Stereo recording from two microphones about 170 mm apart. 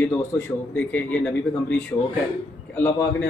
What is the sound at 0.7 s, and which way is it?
Speech, 10° left (ahead or behind).